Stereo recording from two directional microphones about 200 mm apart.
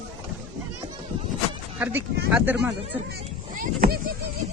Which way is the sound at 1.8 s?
5° right (ahead or behind).